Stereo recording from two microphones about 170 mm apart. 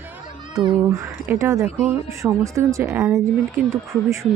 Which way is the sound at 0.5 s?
20° right (ahead or behind).